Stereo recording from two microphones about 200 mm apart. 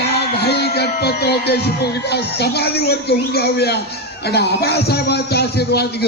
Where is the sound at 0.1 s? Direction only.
55° left (ahead or behind).